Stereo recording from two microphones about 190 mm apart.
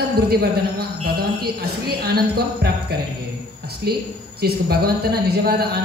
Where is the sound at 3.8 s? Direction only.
60° right (ahead or behind).